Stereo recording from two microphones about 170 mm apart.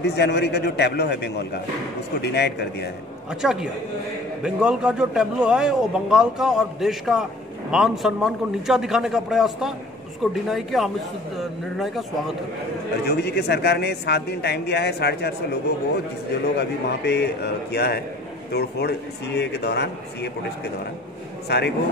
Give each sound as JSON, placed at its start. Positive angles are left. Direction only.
{"t": 0.0, "sound": "a man's voice", "side_deg": 80}
{"t": 3.3, "sound": "a man's voice", "side_deg": -5}
{"t": 13.0, "sound": "a man's voice", "side_deg": 70}
{"t": 16.4, "sound": "a man's voice", "side_deg": 80}
{"t": 21.5, "sound": "a man's voice", "side_deg": 75}